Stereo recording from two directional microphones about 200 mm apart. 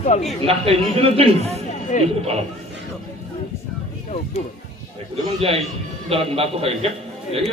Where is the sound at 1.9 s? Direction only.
40° left (ahead or behind).